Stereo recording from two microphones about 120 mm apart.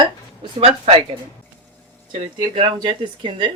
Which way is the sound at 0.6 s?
50° right (ahead or behind).